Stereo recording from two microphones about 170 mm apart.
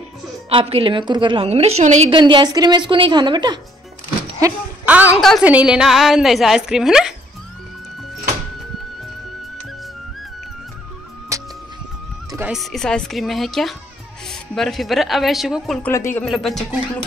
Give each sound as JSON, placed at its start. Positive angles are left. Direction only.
{"t": 0.5, "sound": "a woman's voice", "side_deg": -30}
{"t": 2.1, "sound": "a woman's voice", "side_deg": -25}
{"t": 4.4, "sound": "speech", "side_deg": -15}
{"t": 11.3, "sound": "music", "side_deg": -15}
{"t": 12.4, "sound": "speech", "side_deg": -5}
{"t": 15.9, "sound": "speech", "side_deg": 15}
{"t": 16.3, "sound": "speech", "side_deg": 0}